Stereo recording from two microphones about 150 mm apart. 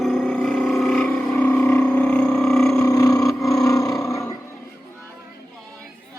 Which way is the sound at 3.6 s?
20° left (ahead or behind).